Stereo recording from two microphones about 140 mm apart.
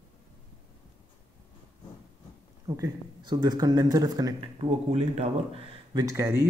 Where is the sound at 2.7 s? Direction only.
30° right (ahead or behind).